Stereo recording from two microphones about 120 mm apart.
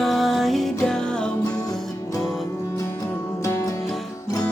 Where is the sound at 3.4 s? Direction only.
25° left (ahead or behind).